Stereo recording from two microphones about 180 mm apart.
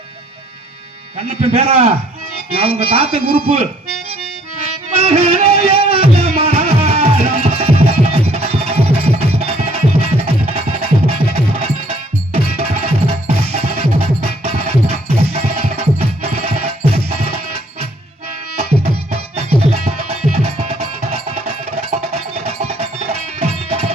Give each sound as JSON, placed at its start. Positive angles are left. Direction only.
{"t": 1.1, "sound": "speech", "side_deg": -35}
{"t": 4.9, "sound": "music", "side_deg": -35}